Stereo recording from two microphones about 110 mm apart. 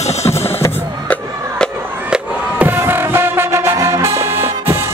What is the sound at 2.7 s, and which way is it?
Music, 20° right (ahead or behind).